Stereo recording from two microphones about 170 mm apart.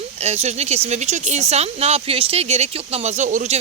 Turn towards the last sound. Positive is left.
turn(degrees=-45)  # may be behind; listen again after turning